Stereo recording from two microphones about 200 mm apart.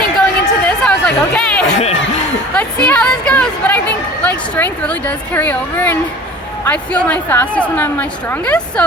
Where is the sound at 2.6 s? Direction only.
5° left (ahead or behind).